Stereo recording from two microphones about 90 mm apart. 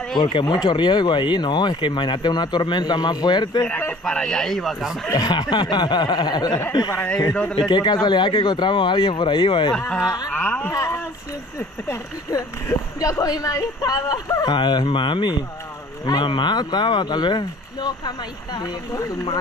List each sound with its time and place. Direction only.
0.2 s speech: 65° left (ahead or behind)
3.6 s speech: 20° left (ahead or behind)
4.0 s speech: 5° left (ahead or behind)
5.1 s speech: 50° left (ahead or behind)
9.8 s speech: 10° left (ahead or behind)
10.7 s speech: 40° left (ahead or behind)